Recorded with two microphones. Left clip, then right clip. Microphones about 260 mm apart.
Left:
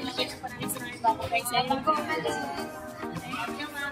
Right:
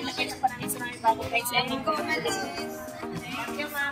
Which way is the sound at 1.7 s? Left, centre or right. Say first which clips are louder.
Left 1 dB; centre.